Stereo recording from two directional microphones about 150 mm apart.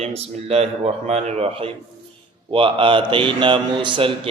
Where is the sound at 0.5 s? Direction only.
45° right (ahead or behind).